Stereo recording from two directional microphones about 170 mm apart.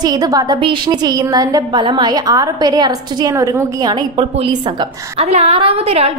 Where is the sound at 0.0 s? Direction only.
20° right (ahead or behind).